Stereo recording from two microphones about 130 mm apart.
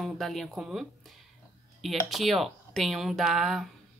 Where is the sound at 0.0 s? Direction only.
Centre (ahead or behind).